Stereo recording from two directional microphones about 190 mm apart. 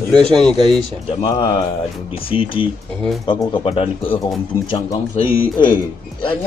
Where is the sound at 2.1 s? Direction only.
30° left (ahead or behind).